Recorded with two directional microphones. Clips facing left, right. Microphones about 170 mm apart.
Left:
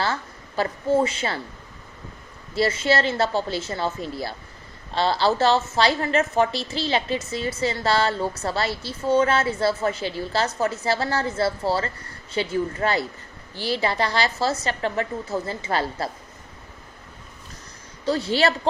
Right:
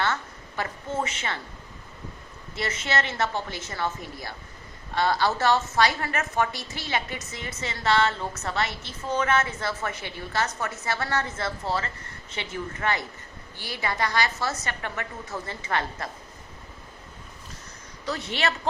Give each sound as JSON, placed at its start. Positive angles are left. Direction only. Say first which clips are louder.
{"t": 0.0, "sound": "a woman's voice", "louder": "left 2 dB", "side_deg": 30}
{"t": 2.6, "sound": "a woman's voice", "louder": "left 7 dB", "side_deg": 30}
{"t": 18.0, "sound": "speech", "louder": "left 7 dB", "side_deg": 30}